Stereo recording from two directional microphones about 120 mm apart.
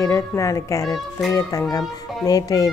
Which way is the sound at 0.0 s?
25° left (ahead or behind).